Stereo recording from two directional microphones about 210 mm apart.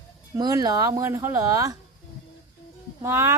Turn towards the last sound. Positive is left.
turn(degrees=-10)  # may be behind; listen again after turning